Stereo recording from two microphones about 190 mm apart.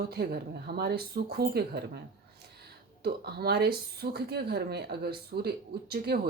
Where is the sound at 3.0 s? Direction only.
55° right (ahead or behind).